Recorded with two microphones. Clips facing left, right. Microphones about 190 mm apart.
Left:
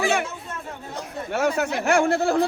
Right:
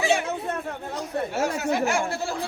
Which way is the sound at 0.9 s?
60° left (ahead or behind).